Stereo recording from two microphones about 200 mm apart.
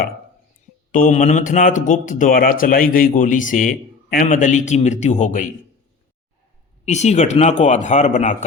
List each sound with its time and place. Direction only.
0.9 s speech: 40° left (ahead or behind)
6.8 s speech: 35° left (ahead or behind)